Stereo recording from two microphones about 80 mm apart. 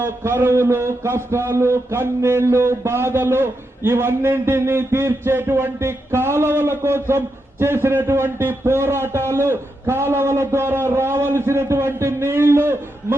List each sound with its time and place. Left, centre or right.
0.0 s a man's voice: right